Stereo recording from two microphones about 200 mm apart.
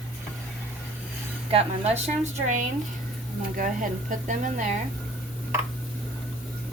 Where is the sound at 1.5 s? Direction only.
30° right (ahead or behind).